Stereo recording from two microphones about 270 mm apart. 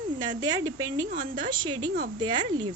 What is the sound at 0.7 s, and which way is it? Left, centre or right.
Speech, right.